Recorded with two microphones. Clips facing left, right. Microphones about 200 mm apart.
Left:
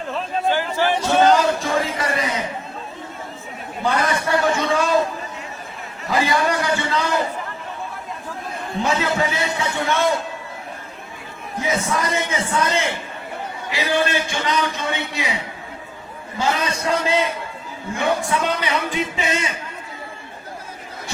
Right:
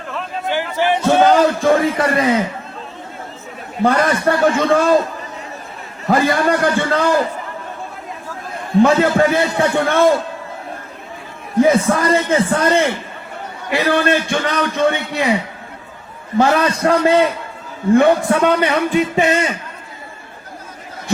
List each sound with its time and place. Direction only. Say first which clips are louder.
0.5 s music: right 5 dB; 15° right (ahead or behind)
1.0 s a sound: right 4 dB; 55° right (ahead or behind)
3.8 s a man's voice: right 6 dB; 55° right (ahead or behind)
6.1 s a man's voice: right 5 dB; 55° right (ahead or behind)
8.8 s a man's voice: right 9 dB; 55° right (ahead or behind)
11.6 s a man's voice: right 9 dB; 55° right (ahead or behind)
16.4 s a man's voice: right 8 dB; 60° right (ahead or behind)